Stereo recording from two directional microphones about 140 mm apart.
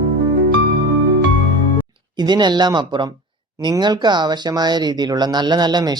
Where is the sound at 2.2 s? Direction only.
30° right (ahead or behind).